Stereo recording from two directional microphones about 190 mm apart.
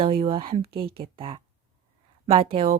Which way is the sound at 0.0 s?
30° right (ahead or behind).